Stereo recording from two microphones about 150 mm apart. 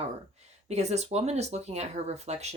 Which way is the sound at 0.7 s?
45° right (ahead or behind).